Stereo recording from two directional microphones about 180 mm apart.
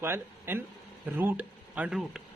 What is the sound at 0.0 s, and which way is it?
A man's voice, 15° right (ahead or behind).